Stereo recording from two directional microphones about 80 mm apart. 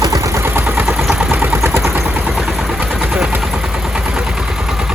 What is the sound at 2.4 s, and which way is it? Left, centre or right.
Vehicle, centre.